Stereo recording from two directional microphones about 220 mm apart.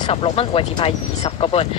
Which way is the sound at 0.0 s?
25° left (ahead or behind).